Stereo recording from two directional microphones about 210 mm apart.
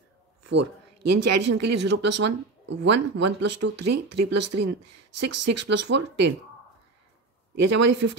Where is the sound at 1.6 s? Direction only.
55° right (ahead or behind).